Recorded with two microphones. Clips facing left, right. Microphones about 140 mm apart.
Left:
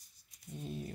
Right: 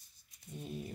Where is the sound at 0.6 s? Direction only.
5° right (ahead or behind).